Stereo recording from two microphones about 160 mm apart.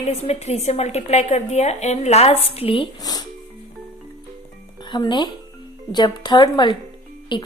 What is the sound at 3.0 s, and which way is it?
Speech, 25° left (ahead or behind).